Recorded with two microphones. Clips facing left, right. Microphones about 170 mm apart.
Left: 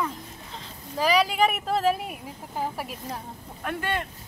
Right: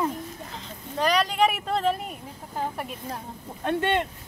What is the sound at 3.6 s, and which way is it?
Speech, 25° right (ahead or behind).